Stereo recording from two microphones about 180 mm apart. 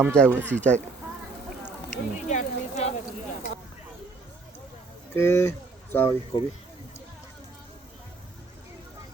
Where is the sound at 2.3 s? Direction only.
40° left (ahead or behind).